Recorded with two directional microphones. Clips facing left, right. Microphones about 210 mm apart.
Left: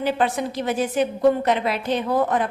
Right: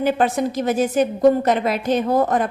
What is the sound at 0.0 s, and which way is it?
A woman's voice, 45° right (ahead or behind).